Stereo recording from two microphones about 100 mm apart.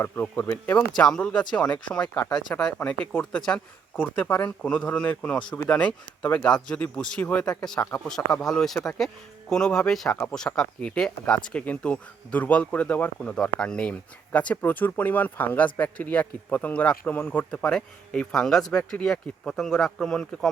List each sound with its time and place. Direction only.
0.0 s speech: 20° left (ahead or behind)